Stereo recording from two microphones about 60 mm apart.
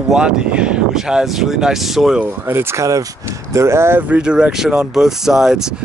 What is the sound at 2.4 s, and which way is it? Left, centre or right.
Speech, right.